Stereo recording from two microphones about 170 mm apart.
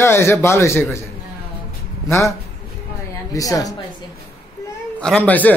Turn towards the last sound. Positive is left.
turn(degrees=10)  # may be behind; listen again after turning